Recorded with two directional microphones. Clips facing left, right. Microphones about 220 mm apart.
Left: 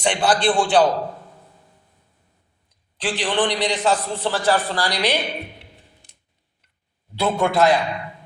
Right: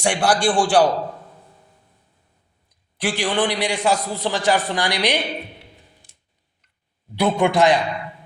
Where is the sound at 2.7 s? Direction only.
10° right (ahead or behind).